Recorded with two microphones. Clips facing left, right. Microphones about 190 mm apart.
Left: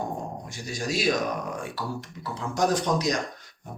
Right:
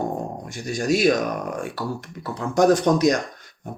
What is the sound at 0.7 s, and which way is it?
Speech, 55° right (ahead or behind).